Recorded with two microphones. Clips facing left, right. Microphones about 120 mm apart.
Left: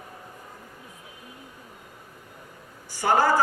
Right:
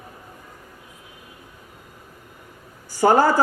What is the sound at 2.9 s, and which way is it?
Speech, 40° right (ahead or behind).